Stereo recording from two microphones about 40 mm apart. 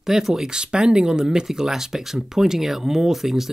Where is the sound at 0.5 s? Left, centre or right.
Right.